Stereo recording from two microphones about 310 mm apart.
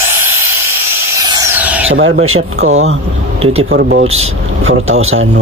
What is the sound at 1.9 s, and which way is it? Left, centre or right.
Speech, right.